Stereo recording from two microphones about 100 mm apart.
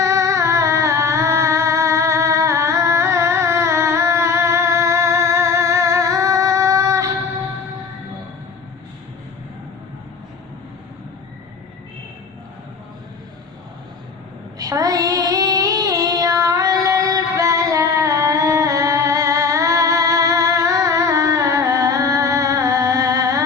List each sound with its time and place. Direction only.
0.0 s music: 30° right (ahead or behind)
14.6 s child singing: 35° right (ahead or behind)